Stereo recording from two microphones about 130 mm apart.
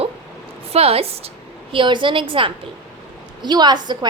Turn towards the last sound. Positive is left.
turn(degrees=-35)  # may be behind; listen again after turning